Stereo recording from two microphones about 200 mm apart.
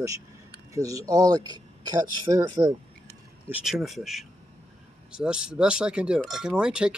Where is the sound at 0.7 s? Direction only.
15° right (ahead or behind).